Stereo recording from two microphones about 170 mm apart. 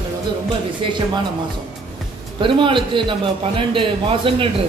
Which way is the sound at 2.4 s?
30° right (ahead or behind).